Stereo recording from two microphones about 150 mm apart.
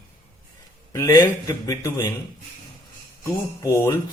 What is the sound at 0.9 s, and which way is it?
A man's voice, 25° left (ahead or behind).